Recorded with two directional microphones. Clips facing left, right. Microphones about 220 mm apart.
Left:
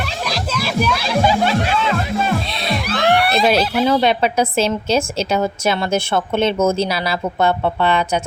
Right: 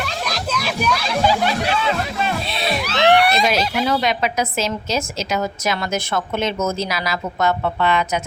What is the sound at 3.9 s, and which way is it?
A woman's voice, 30° left (ahead or behind).